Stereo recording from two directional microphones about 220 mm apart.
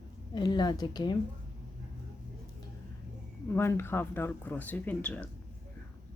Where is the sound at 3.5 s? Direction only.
10° left (ahead or behind).